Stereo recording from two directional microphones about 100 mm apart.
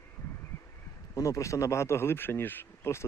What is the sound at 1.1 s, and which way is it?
Speech, 30° left (ahead or behind).